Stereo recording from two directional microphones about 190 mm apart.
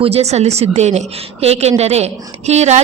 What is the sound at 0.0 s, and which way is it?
A woman's voice, 35° right (ahead or behind).